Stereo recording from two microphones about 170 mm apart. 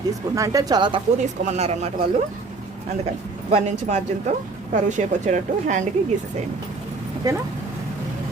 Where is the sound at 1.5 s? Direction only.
40° right (ahead or behind).